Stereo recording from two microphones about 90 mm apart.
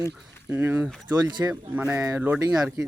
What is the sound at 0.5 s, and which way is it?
Speech, 20° right (ahead or behind).